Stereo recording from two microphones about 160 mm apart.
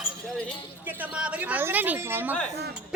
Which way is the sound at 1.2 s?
10° right (ahead or behind).